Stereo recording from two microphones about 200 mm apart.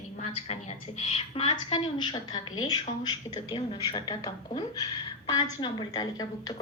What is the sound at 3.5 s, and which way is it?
A woman's voice, 20° left (ahead or behind).